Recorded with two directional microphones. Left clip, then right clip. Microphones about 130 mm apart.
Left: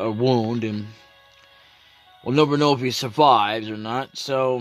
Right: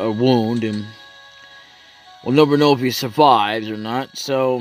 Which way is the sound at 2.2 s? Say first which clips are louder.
Right 5 dB; 25° right (ahead or behind).